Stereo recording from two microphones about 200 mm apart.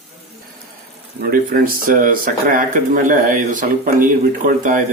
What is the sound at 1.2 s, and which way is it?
Speech, 45° right (ahead or behind).